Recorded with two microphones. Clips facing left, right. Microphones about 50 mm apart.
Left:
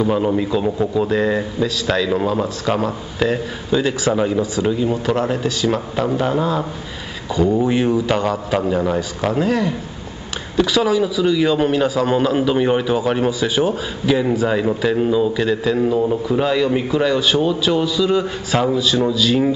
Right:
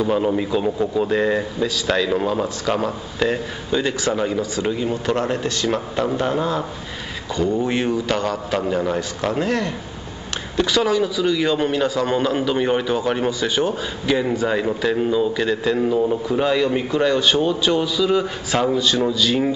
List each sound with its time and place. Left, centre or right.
0.0 s a man's voice: centre
8.1 s a man's voice: centre
8.7 s a man's voice: centre